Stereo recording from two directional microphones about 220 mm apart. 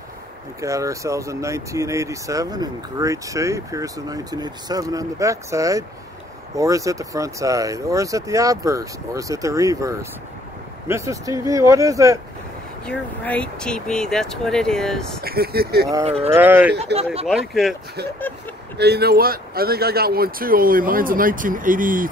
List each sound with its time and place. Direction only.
0.6 s speech: 15° right (ahead or behind)
12.8 s speech: 5° left (ahead or behind)
15.2 s speech: 45° right (ahead or behind)
16.3 s speech: 10° right (ahead or behind)
16.7 s speech: 25° right (ahead or behind)
17.3 s speech: centre (ahead or behind)
18.8 s speech: 45° right (ahead or behind)